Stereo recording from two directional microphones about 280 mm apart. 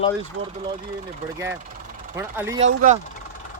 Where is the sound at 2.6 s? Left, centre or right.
Right.